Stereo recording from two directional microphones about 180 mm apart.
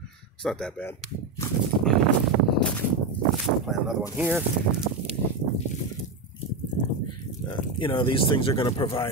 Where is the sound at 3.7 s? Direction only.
5° right (ahead or behind).